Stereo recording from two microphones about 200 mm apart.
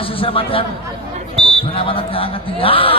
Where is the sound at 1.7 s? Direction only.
25° left (ahead or behind).